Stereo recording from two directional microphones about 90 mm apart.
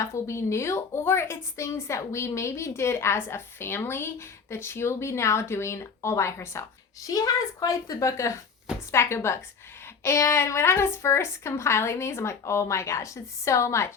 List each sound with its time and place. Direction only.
0.0 s a woman's voice: 35° left (ahead or behind)
7.1 s a woman's voice: 40° left (ahead or behind)